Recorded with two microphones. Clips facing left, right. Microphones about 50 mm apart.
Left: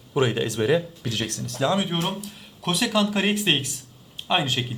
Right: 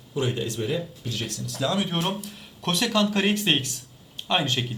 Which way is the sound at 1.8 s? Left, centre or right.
Centre.